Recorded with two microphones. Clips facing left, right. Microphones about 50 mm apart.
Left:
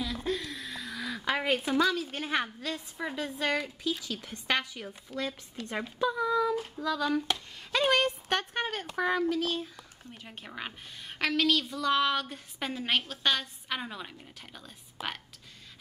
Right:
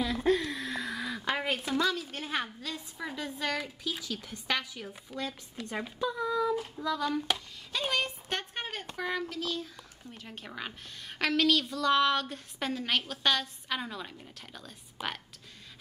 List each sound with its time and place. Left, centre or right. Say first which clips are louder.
0.0 s a sound: right 5 dB; right
0.9 s a sound: right 1 dB; centre
1.2 s a sound: left 3 dB; centre
1.6 s a woman's voice: left 3 dB; centre
3.3 s a woman's voice: left 3 dB; centre
5.7 s speech: left 3 dB; left
6.1 s a woman's voice: left 1 dB; centre
6.8 s hands: left 3 dB; centre
7.3 s a woman's voice: right 1 dB; centre
7.7 s speech: left 6 dB; left
9.0 s speech: left 6 dB; left
10.1 s a woman's voice: even; centre